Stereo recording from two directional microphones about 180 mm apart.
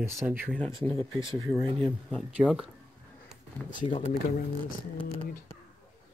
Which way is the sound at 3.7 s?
25° left (ahead or behind).